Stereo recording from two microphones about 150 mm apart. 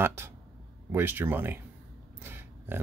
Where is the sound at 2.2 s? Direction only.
15° right (ahead or behind).